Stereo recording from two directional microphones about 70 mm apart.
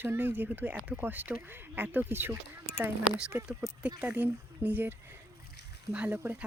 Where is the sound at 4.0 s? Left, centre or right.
Right.